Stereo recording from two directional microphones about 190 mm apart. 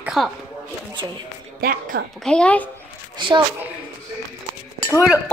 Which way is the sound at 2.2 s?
5° left (ahead or behind).